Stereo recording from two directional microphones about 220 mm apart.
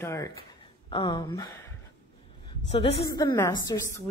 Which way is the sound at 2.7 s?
25° left (ahead or behind).